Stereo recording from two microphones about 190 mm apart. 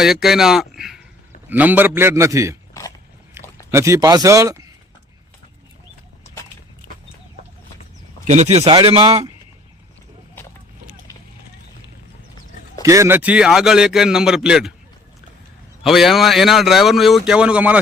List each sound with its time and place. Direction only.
0.0 s a man's voice: centre (ahead or behind)
3.7 s a man's voice: 15° right (ahead or behind)
8.3 s speech: 35° right (ahead or behind)
12.8 s a man's voice: 15° right (ahead or behind)
15.8 s a man's voice: centre (ahead or behind)